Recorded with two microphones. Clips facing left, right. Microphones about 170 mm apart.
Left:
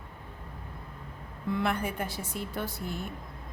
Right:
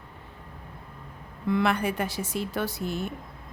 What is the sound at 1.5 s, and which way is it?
A woman's voice, 85° right.